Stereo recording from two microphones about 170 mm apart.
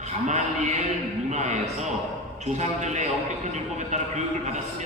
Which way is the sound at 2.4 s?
40° right (ahead or behind).